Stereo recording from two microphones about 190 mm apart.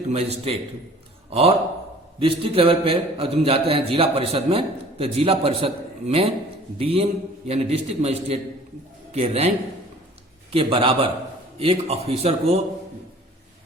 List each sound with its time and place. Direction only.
0.1 s a man's voice: 35° right (ahead or behind)
10.5 s a man's voice: 30° right (ahead or behind)